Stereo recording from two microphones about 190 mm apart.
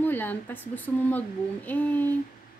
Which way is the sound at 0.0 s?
10° left (ahead or behind).